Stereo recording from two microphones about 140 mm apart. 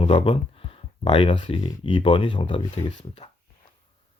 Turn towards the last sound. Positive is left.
turn(degrees=45)  # may be behind; listen again after turning